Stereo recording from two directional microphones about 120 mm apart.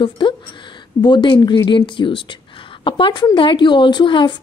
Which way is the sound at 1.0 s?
40° left (ahead or behind).